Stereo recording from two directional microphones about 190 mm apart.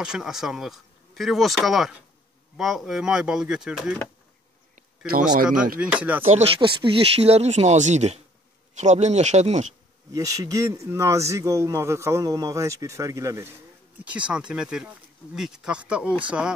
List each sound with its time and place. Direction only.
0.0 s speech: 5° right (ahead or behind)
4.7 s insect: 50° right (ahead or behind)
5.8 s speech: 5° right (ahead or behind)
6.2 s speech: 30° right (ahead or behind)
10.1 s speech: 20° right (ahead or behind)
14.0 s speech: 5° right (ahead or behind)